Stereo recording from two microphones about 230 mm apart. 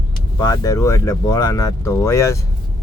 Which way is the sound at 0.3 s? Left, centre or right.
Centre.